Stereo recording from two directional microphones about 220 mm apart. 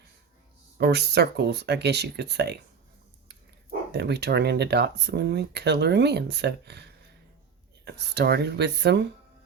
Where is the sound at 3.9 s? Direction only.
50° right (ahead or behind).